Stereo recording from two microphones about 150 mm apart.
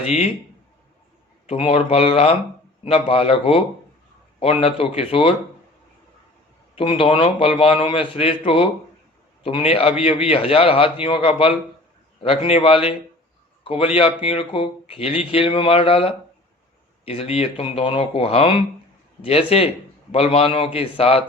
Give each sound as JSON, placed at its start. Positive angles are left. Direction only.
{"t": 0.0, "sound": "speech", "side_deg": 45}
{"t": 1.5, "sound": "speech", "side_deg": 40}
{"t": 4.9, "sound": "speech", "side_deg": 40}
{"t": 6.7, "sound": "speech", "side_deg": 40}